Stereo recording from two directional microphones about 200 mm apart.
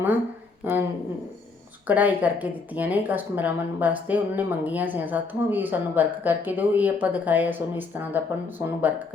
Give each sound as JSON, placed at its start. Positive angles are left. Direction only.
{"t": 0.6, "sound": "speech", "side_deg": -10}
{"t": 1.9, "sound": "speech", "side_deg": -10}